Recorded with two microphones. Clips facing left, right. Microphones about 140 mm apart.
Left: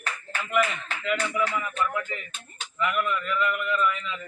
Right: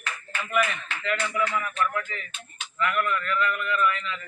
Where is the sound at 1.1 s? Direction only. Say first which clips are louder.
Left 1 dB; 15° left (ahead or behind).